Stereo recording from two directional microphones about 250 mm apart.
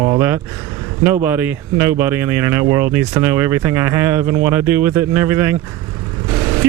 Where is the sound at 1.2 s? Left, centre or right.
Centre.